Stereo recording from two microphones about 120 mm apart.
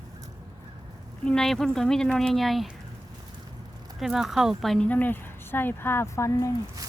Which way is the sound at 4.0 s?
Centre (ahead or behind).